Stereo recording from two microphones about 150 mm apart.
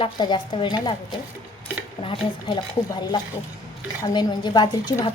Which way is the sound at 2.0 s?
35° left (ahead or behind).